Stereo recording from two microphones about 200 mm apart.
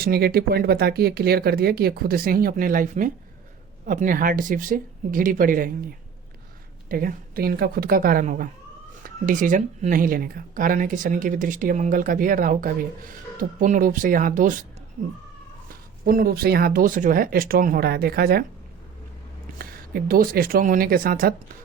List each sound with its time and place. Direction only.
0.0 s speech: 50° right (ahead or behind)
6.8 s speech: 45° right (ahead or behind)
16.0 s speech: 50° right (ahead or behind)
19.5 s speech: 50° right (ahead or behind)